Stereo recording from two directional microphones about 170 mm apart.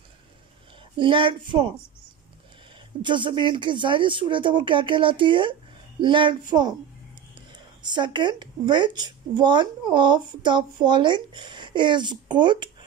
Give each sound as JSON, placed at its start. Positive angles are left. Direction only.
{"t": 0.9, "sound": "speech", "side_deg": -30}
{"t": 3.0, "sound": "speech", "side_deg": -30}
{"t": 7.8, "sound": "speech", "side_deg": -25}